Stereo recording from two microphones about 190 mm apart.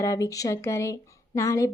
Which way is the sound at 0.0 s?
15° left (ahead or behind).